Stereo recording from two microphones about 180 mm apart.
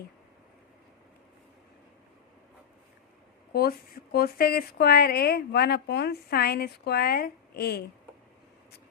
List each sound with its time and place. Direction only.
3.5 s speech: 60° left (ahead or behind)